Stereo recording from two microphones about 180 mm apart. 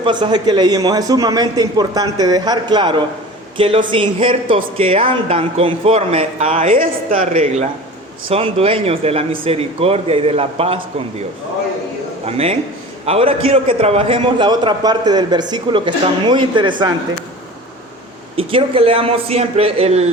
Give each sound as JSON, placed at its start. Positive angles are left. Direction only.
{"t": 0.0, "sound": "a man's voice", "side_deg": -25}
{"t": 7.2, "sound": "speech", "side_deg": -35}
{"t": 12.2, "sound": "a man's voice", "side_deg": -35}
{"t": 18.3, "sound": "speech", "side_deg": -30}